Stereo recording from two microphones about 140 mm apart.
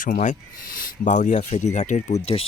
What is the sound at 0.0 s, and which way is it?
Speech, 65° left (ahead or behind).